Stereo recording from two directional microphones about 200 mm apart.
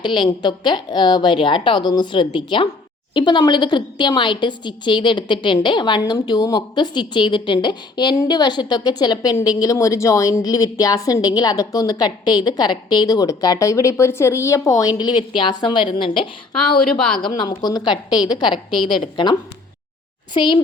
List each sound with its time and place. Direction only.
0.0 s a woman's voice: 25° left (ahead or behind)